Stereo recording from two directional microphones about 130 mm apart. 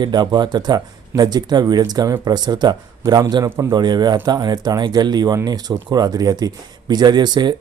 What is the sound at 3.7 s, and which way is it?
Speech, 35° right (ahead or behind).